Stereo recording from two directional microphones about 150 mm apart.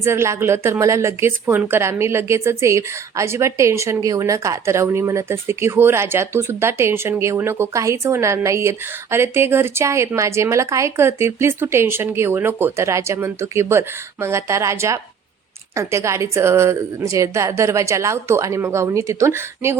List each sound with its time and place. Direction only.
0.0 s a woman's voice: 15° right (ahead or behind)